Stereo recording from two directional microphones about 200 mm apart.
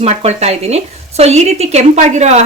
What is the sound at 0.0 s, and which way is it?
Speech, 30° right (ahead or behind).